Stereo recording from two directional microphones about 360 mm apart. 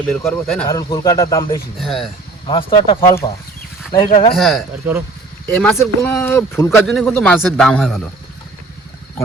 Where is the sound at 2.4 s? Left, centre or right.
Centre.